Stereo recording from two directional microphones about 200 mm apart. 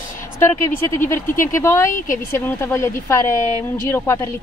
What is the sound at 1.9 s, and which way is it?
Speech, 40° left (ahead or behind).